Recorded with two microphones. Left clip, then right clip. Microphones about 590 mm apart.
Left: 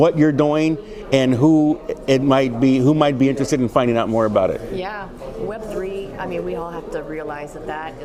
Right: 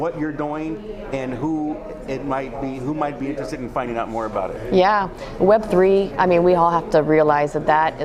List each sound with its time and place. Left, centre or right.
0.0 s a man's voice: left
4.7 s a woman's voice: right